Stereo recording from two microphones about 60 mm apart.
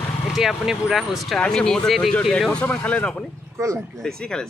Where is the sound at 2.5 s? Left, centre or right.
Left.